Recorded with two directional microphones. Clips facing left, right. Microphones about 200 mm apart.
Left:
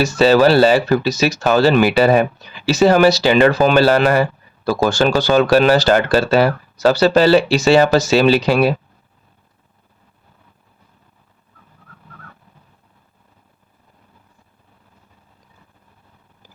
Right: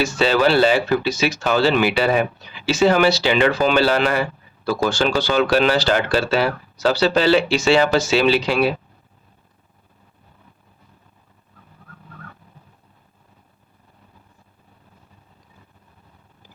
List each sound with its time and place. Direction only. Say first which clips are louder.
0.0 s speech: left 5 dB; 40° left (ahead or behind)